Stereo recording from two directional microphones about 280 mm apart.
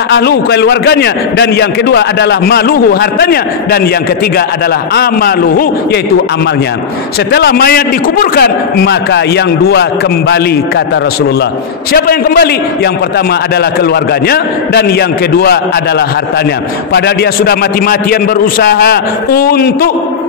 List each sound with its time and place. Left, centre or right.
0.1 s a man's voice: left
4.9 s a man's voice: left
7.3 s a man's voice: left
11.9 s a man's voice: left
14.2 s a man's voice: left
16.9 s a man's voice: left